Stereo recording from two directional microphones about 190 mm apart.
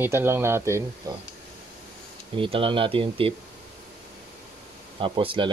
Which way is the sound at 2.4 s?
25° right (ahead or behind).